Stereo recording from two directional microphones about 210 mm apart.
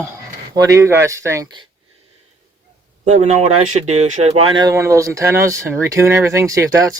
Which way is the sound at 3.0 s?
35° right (ahead or behind).